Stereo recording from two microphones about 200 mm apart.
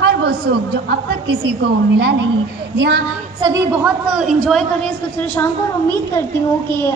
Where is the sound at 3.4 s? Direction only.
15° right (ahead or behind); by 5.4 s 10° left (ahead or behind).